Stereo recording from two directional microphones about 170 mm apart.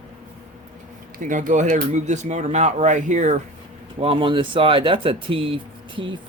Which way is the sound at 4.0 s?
30° right (ahead or behind).